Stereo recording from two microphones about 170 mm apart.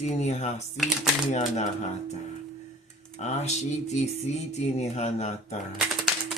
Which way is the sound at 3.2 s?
40° left (ahead or behind).